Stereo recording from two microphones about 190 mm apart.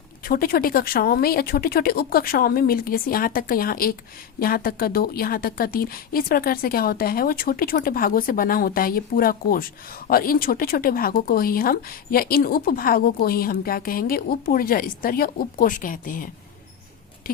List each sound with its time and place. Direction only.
0.3 s speech: 50° left (ahead or behind)